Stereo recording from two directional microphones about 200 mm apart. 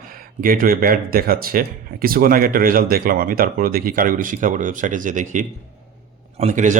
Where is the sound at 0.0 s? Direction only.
45° right (ahead or behind).